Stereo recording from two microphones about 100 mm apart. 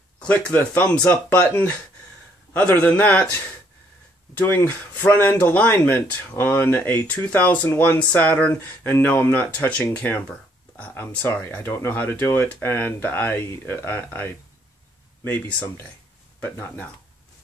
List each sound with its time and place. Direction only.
0.2 s speech: 15° left (ahead or behind)
2.5 s speech: 15° left (ahead or behind)
4.6 s speech: 20° left (ahead or behind)
11.6 s speech: 25° left (ahead or behind)